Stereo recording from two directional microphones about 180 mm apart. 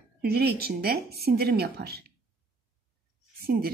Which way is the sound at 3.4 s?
60° right (ahead or behind).